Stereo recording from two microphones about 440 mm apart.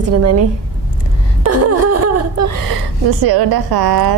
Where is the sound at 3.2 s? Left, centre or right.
Right.